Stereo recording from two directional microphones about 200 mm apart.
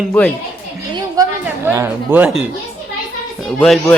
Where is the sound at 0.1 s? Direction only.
5° left (ahead or behind).